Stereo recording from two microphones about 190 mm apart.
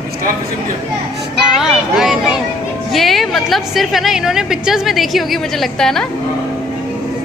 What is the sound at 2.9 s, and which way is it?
A woman's voice, centre (ahead or behind).